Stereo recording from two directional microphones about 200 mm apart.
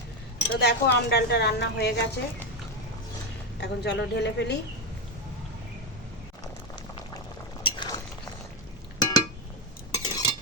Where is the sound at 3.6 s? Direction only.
60° left (ahead or behind).